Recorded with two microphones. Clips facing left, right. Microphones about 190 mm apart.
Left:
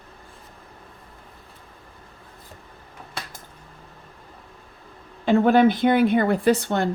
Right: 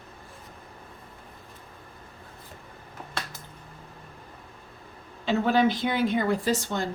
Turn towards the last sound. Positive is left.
turn(degrees=60)  # may be behind; listen again after turning